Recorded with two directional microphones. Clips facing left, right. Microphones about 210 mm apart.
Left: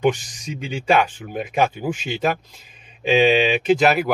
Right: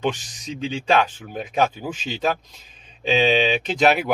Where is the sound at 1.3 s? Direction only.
5° left (ahead or behind).